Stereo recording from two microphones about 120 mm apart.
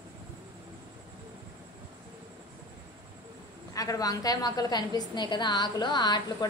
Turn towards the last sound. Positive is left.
turn(degrees=35)  # may be behind; listen again after turning